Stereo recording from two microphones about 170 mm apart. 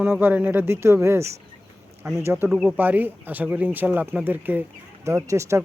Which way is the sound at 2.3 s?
5° right (ahead or behind).